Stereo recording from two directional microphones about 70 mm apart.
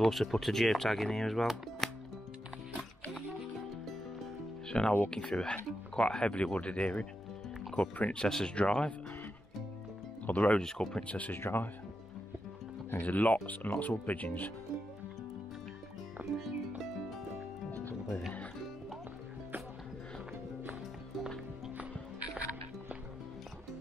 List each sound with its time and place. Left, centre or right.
0.0 s speech: centre
4.6 s speech: centre
10.2 s speech: centre
10.6 s speech: centre
11.3 s speech: left
13.0 s speech: left
16.3 s music: centre